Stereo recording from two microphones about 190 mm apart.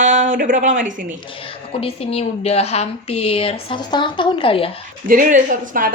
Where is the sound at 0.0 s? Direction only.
40° right (ahead or behind).